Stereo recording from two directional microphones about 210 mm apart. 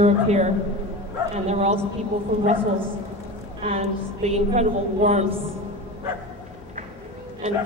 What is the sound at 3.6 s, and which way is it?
A woman's voice, 30° right (ahead or behind).